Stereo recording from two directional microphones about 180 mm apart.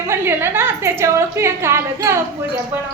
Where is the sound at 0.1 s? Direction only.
15° right (ahead or behind).